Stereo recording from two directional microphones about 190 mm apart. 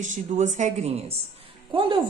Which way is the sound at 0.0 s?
40° right (ahead or behind).